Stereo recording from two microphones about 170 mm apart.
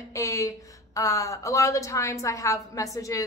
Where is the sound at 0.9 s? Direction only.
20° left (ahead or behind).